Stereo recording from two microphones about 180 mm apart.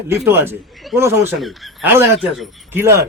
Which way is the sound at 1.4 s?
Centre (ahead or behind).